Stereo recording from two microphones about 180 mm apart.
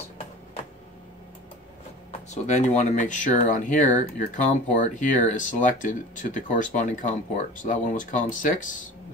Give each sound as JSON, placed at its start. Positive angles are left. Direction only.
{"t": 2.2, "sound": "speech", "side_deg": 40}